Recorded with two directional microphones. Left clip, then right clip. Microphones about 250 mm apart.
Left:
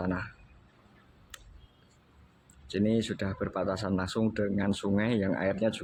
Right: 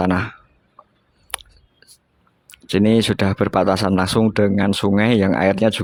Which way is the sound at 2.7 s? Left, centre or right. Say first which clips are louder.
Right 13 dB; right.